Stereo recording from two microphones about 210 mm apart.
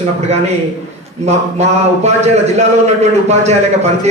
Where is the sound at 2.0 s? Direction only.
30° right (ahead or behind).